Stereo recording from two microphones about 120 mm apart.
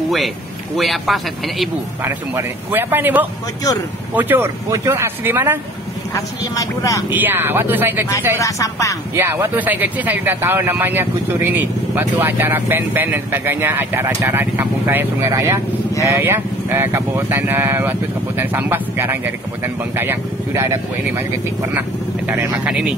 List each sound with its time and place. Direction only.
0.7 s speech: centre (ahead or behind)
2.3 s speech: 20° right (ahead or behind)
6.5 s speech: 30° left (ahead or behind)
7.1 s speech: 15° right (ahead or behind)
8.4 s speech: 25° left (ahead or behind)
9.1 s speech: 20° right (ahead or behind)